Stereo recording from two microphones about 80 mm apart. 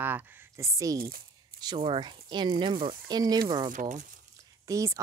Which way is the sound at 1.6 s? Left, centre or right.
Right.